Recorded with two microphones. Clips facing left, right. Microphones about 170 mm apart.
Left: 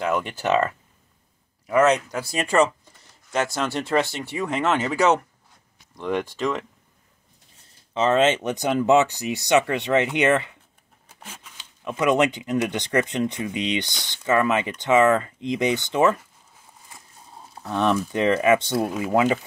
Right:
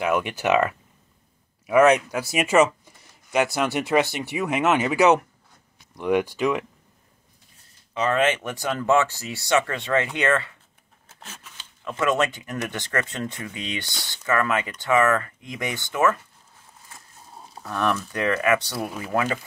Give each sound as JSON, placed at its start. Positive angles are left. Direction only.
{"t": 0.0, "sound": "speech", "side_deg": -15}
{"t": 4.5, "sound": "speech", "side_deg": -15}
{"t": 5.9, "sound": "speech", "side_deg": -10}
{"t": 7.9, "sound": "speech", "side_deg": 25}
{"t": 17.6, "sound": "speech", "side_deg": 20}